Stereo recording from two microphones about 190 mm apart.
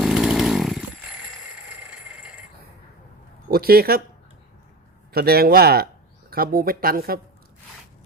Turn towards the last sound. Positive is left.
turn(degrees=-50)  # may be behind; listen again after turning